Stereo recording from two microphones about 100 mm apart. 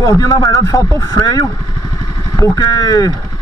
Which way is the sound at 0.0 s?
40° left (ahead or behind).